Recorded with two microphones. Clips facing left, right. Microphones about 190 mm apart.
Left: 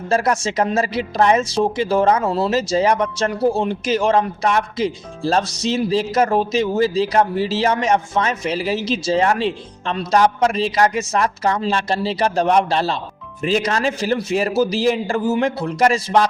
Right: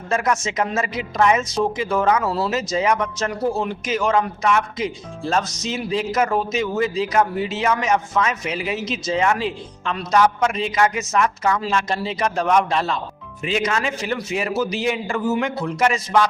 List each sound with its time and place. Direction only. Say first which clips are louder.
0.1 s a woman's voice: left 3 dB; 35° left (ahead or behind)